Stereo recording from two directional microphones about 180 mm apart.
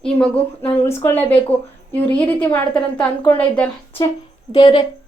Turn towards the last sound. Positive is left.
turn(degrees=30)  # may be behind; listen again after turning